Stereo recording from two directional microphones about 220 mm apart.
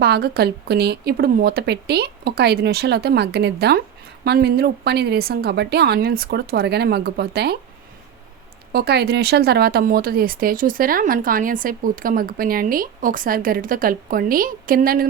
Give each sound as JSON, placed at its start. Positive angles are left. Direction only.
{"t": 0.0, "sound": "a woman's voice", "side_deg": -45}
{"t": 8.7, "sound": "speech", "side_deg": -45}